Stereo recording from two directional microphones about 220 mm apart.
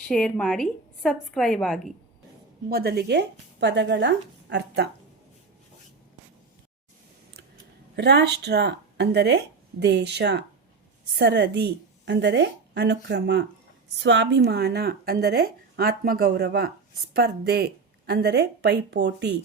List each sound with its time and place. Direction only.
0.1 s a woman's voice: 5° left (ahead or behind)
2.6 s speech: 45° right (ahead or behind)
7.9 s speech: 50° right (ahead or behind)